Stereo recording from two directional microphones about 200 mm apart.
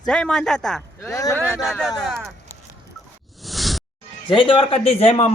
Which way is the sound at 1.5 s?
Centre (ahead or behind).